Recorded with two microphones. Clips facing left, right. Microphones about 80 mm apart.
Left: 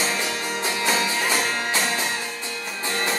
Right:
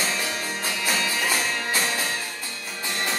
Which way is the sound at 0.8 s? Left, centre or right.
Left.